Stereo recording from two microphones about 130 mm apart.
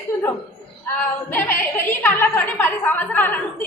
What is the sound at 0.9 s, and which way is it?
A woman's voice, 15° left (ahead or behind).